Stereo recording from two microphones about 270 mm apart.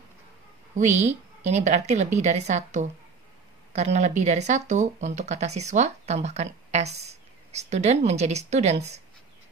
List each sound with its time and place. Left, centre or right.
0.7 s speech: right